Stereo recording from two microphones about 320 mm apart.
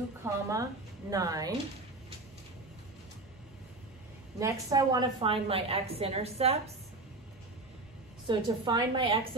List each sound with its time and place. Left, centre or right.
0.2 s a woman's voice: centre
4.4 s a woman's voice: centre
8.3 s a woman's voice: centre